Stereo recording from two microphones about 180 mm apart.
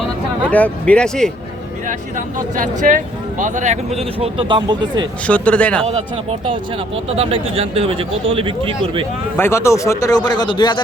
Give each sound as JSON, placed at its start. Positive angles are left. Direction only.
{"t": 0.5, "sound": "speech", "side_deg": 10}
{"t": 1.9, "sound": "speech", "side_deg": -45}
{"t": 5.2, "sound": "speech", "side_deg": 5}
{"t": 7.1, "sound": "speech", "side_deg": -30}
{"t": 9.4, "sound": "speech", "side_deg": 15}